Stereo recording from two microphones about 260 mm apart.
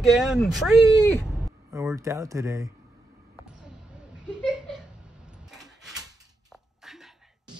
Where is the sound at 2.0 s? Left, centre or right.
Centre.